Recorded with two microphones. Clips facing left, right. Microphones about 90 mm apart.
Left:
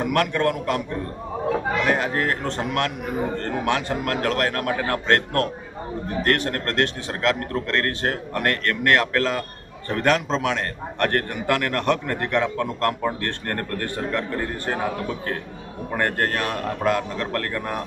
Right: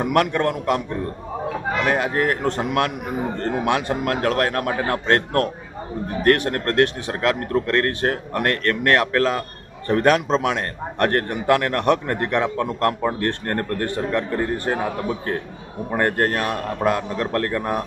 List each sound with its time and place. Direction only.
0.0 s speech: 20° right (ahead or behind)
1.9 s a man's voice: 20° right (ahead or behind)